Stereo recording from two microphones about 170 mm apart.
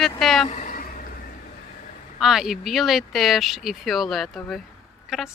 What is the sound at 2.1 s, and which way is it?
Speech, centre (ahead or behind).